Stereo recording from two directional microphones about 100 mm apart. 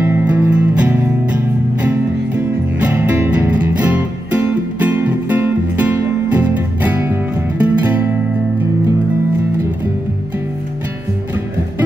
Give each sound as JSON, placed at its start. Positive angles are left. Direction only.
{"t": 0.0, "sound": "music", "side_deg": -20}